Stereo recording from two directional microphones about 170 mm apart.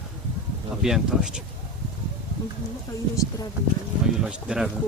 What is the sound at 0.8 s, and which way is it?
Speech, 5° right (ahead or behind).